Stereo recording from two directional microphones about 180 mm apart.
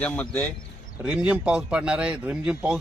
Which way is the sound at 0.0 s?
10° left (ahead or behind).